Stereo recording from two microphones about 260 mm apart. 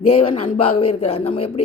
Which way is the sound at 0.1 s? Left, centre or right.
Left.